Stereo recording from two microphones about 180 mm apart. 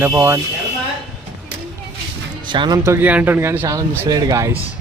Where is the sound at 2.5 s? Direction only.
25° right (ahead or behind).